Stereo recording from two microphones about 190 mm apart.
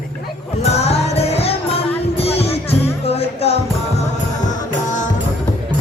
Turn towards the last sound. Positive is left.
turn(degrees=30)  # may be behind; listen again after turning